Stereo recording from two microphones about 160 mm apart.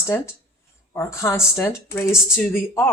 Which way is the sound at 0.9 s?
15° left (ahead or behind).